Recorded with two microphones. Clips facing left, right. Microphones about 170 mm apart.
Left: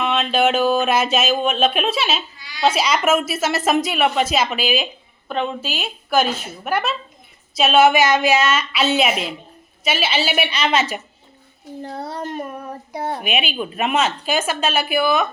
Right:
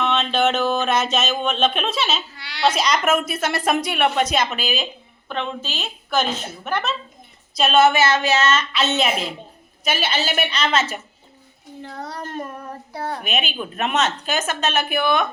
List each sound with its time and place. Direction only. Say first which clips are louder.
0.0 s speech: left 1 dB; 5° left (ahead or behind)
2.3 s crying: left 1 dB; 70° right (ahead or behind)
2.6 s speech: left 2 dB; 5° left (ahead or behind)
11.8 s a child's voice: left 3 dB; 35° left (ahead or behind)
12.2 s child singing: left 3 dB; 15° left (ahead or behind)
13.2 s speech: left 3 dB; 10° left (ahead or behind)